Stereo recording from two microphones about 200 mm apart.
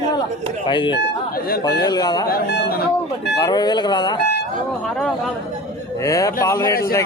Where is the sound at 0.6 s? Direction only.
25° left (ahead or behind).